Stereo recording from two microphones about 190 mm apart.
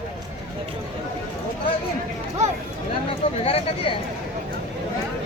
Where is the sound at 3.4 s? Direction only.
30° left (ahead or behind).